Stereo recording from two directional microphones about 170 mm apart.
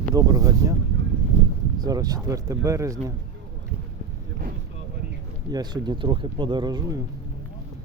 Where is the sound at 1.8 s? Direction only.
20° right (ahead or behind).